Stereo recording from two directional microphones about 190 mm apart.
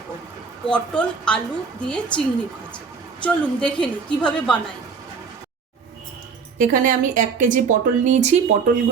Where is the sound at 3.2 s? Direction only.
5° left (ahead or behind).